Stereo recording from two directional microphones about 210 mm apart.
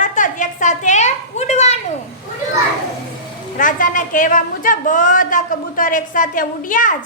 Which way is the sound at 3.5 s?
40° left (ahead or behind).